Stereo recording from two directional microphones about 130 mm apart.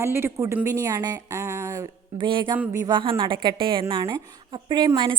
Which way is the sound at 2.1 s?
35° right (ahead or behind).